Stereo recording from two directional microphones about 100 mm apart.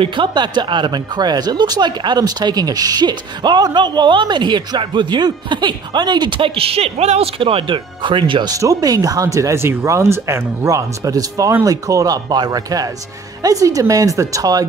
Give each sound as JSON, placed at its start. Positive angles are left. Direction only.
{"t": 0.0, "sound": "speech", "side_deg": -55}
{"t": 8.5, "sound": "speech", "side_deg": -35}